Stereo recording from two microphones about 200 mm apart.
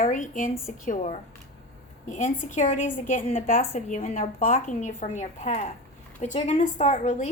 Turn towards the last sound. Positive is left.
turn(degrees=40)  # may be behind; listen again after turning